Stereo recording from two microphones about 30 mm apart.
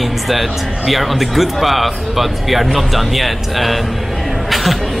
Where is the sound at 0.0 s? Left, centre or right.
Centre.